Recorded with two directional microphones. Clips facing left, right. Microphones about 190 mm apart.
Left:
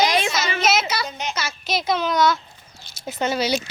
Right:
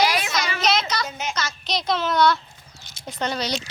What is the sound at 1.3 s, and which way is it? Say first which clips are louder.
Speech: left 2 dB; 5° left (ahead or behind).